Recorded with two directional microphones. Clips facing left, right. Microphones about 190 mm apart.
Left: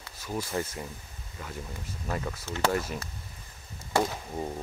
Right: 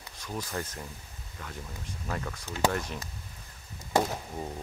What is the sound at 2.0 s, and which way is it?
Speech, 5° left (ahead or behind).